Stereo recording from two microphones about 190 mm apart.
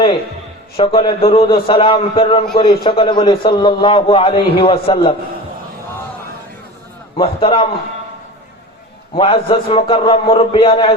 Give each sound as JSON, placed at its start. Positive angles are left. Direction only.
{"t": 0.8, "sound": "a man's voice", "side_deg": 30}
{"t": 7.2, "sound": "a man's voice", "side_deg": 30}
{"t": 9.1, "sound": "a man's voice", "side_deg": 30}